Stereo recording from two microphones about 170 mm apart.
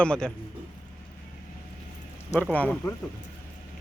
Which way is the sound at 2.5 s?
10° left (ahead or behind).